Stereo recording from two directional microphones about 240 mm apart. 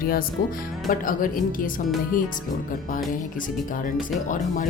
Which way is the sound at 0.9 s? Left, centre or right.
Left.